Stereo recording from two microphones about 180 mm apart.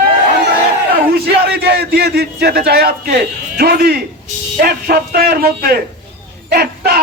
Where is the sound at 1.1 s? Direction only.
60° right (ahead or behind).